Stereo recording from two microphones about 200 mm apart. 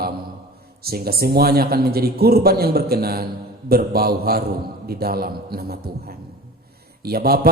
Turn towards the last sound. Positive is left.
turn(degrees=-50)  # may be behind; listen again after turning